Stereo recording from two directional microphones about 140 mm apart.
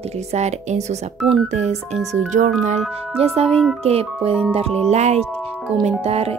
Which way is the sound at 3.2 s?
45° right (ahead or behind).